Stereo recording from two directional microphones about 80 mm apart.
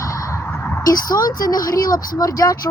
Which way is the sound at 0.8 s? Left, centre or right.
Left.